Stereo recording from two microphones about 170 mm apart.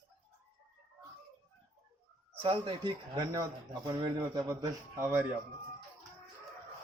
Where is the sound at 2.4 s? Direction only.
30° right (ahead or behind).